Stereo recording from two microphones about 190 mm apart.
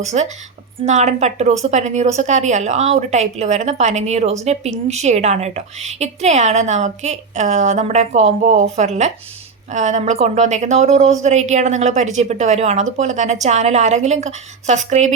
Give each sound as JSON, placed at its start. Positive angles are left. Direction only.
{"t": 0.0, "sound": "a woman's voice", "side_deg": -35}